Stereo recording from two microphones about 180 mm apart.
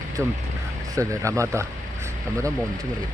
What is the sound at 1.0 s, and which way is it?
Speech, 15° right (ahead or behind).